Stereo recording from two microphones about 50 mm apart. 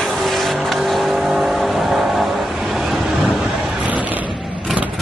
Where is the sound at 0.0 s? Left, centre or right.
Centre.